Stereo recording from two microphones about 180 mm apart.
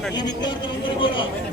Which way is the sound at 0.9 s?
25° left (ahead or behind).